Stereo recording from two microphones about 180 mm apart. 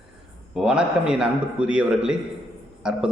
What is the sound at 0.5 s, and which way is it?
A man's voice, 5° right (ahead or behind).